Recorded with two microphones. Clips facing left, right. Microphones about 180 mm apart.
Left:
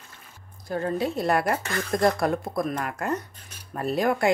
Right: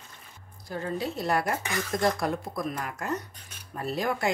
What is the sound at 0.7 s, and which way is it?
Speech, 55° left (ahead or behind).